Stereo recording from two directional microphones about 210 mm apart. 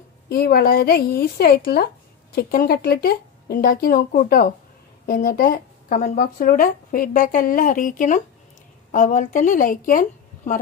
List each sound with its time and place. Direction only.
0.3 s a woman's voice: 45° left (ahead or behind)